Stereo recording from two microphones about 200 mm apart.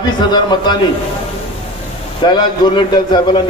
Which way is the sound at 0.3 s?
20° left (ahead or behind).